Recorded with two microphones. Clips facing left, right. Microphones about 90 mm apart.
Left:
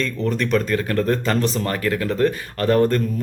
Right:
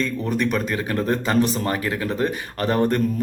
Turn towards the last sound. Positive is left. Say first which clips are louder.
# left 3 dB
turn(degrees=-20)  # may be behind; listen again after turning